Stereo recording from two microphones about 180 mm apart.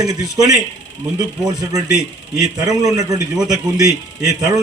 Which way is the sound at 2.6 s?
20° right (ahead or behind).